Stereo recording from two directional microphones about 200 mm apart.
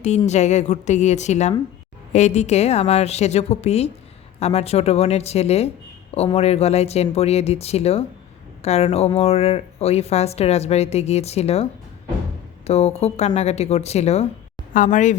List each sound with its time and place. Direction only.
0.0 s a woman's voice: 35° left (ahead or behind)